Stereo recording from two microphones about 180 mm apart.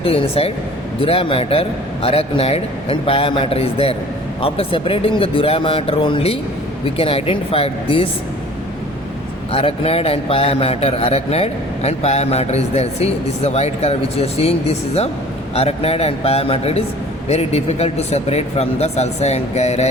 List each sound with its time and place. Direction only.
0.0 s a man's voice: 30° left (ahead or behind)
9.5 s a man's voice: 30° left (ahead or behind)